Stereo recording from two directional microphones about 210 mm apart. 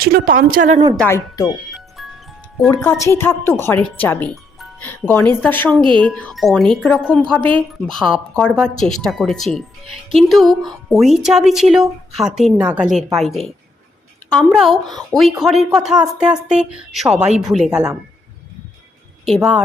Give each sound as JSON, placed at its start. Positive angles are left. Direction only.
{"t": 0.0, "sound": "a woman's voice", "side_deg": -45}
{"t": 0.9, "sound": "speech", "side_deg": 10}
{"t": 2.0, "sound": "music", "side_deg": 0}
{"t": 2.6, "sound": "speech", "side_deg": 15}
{"t": 5.8, "sound": "speech", "side_deg": -25}
{"t": 6.1, "sound": "speech", "side_deg": 5}
{"t": 19.2, "sound": "speech", "side_deg": 0}